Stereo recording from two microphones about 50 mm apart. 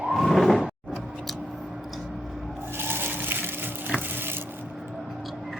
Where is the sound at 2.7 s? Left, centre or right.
Right.